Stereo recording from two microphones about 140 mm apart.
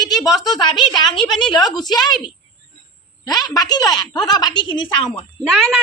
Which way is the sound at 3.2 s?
30° left (ahead or behind).